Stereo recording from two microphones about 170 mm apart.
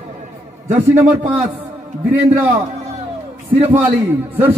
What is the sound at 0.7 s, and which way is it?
Speech, 10° right (ahead or behind).